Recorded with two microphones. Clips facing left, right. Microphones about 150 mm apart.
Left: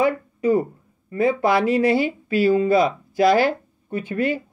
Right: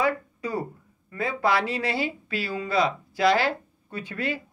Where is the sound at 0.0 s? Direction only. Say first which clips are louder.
Left 6 dB; 20° left (ahead or behind).